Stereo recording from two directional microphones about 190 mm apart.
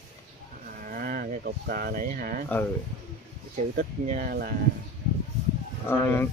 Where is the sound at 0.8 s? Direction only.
50° right (ahead or behind).